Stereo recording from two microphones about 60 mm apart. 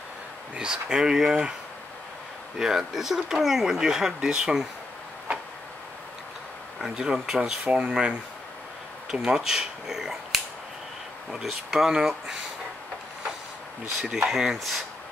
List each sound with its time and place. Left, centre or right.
0.6 s speech: centre
2.6 s speech: centre
6.8 s speech: centre
7.6 s speech: right
9.1 s speech: centre
13.9 s speech: centre